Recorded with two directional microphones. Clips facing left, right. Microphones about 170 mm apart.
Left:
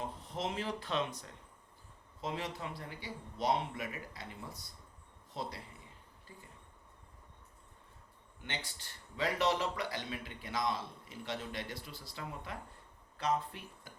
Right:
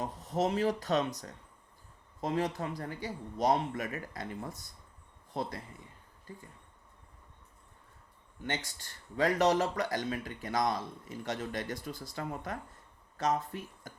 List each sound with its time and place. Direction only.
0.0 s speech: 40° right (ahead or behind)
2.2 s speech: 45° right (ahead or behind)
8.4 s speech: 45° right (ahead or behind)